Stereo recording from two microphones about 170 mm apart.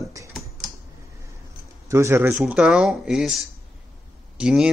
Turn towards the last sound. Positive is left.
turn(degrees=-5)  # may be behind; listen again after turning